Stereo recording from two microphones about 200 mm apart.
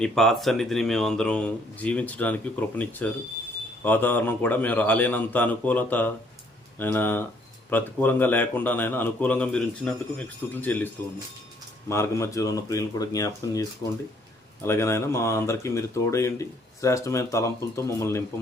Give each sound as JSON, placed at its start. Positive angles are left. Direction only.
{"t": 0.0, "sound": "speech", "side_deg": 0}
{"t": 11.9, "sound": "speech", "side_deg": 15}